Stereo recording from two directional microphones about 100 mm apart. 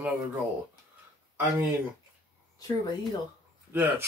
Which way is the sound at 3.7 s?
20° right (ahead or behind).